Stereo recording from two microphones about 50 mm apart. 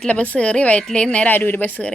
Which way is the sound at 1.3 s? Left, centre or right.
Left.